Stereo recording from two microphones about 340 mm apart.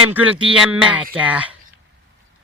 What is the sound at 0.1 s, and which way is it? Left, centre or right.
Speech, centre.